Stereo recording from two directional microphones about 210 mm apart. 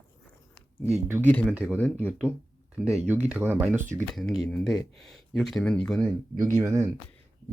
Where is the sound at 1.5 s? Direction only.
5° right (ahead or behind).